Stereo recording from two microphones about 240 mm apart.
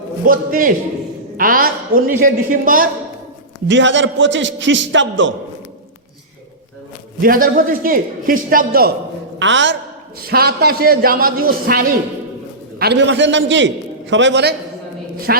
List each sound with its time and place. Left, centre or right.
0.3 s a man's voice: right
3.7 s a man's voice: right
7.2 s a man's voice: right
9.4 s a man's voice: right
12.8 s a man's voice: right